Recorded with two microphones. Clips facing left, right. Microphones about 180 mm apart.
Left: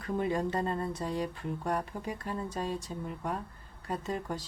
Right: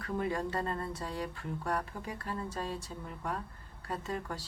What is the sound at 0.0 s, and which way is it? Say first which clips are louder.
Speech: left 3 dB; 20° left (ahead or behind).